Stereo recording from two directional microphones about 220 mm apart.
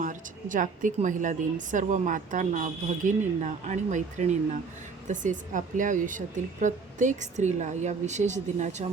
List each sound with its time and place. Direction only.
0.0 s a woman's voice: 35° right (ahead or behind)